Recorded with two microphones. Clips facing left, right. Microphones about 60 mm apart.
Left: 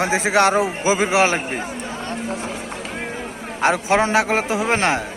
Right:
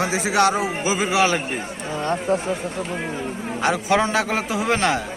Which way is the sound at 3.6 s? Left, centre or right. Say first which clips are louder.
Left 2 dB; left.